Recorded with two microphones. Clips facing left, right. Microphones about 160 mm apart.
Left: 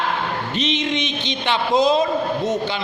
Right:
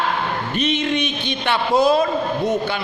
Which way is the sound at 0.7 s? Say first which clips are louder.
Right 2 dB; 20° left (ahead or behind).